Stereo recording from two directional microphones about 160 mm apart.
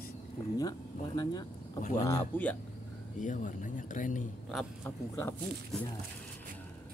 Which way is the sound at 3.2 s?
50° left (ahead or behind).